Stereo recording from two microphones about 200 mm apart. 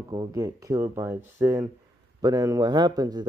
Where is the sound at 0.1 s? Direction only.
15° right (ahead or behind).